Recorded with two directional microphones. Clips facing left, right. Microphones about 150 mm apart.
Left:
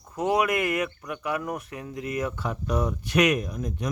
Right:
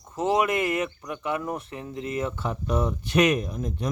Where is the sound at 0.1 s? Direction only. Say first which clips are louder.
Right 1 dB; 25° right (ahead or behind).